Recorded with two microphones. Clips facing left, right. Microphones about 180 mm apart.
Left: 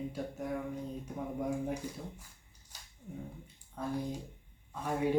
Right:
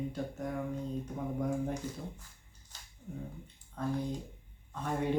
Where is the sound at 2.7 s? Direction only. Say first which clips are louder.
Even; 10° left (ahead or behind).